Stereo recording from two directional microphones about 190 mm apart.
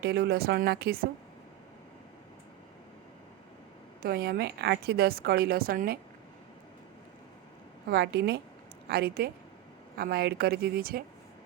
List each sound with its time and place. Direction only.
0.0 s a woman's voice: 55° right (ahead or behind)
4.0 s a woman's voice: 55° right (ahead or behind)
7.9 s a woman's voice: 60° right (ahead or behind)